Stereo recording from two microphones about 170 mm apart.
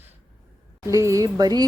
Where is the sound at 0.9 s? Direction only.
20° right (ahead or behind).